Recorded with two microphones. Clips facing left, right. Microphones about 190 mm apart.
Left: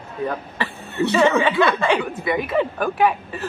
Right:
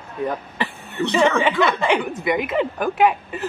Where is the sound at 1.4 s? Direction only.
15° right (ahead or behind).